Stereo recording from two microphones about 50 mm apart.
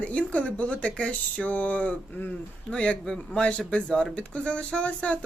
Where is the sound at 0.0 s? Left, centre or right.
Left.